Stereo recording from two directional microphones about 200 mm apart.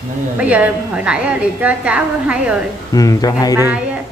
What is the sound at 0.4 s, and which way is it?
A woman's voice, 5° right (ahead or behind).